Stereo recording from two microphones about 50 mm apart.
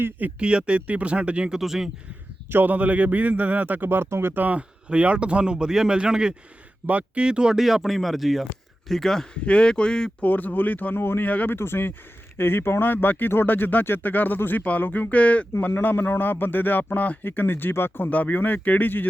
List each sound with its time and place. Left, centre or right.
0.3 s speech: right
1.5 s speech: centre
2.5 s speech: right
2.7 s speech: right
4.4 s speech: right
6.8 s speech: right; by 9.4 s centre
9.4 s speech: left
10.2 s speech: left
10.9 s speech: left
11.3 s speech: left
11.5 s speech: left
18.1 s speech: left